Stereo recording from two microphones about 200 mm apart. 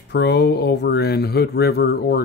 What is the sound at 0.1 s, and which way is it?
Speech, 60° left (ahead or behind).